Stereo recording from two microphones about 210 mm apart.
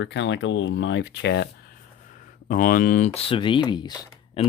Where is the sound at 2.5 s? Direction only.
40° left (ahead or behind).